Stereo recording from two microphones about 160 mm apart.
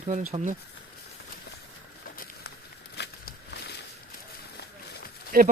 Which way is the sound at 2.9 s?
90° left.